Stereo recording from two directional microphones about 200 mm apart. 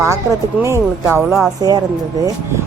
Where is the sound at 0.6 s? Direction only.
15° right (ahead or behind).